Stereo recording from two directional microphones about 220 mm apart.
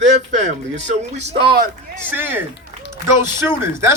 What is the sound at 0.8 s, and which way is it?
Speech, 30° right (ahead or behind).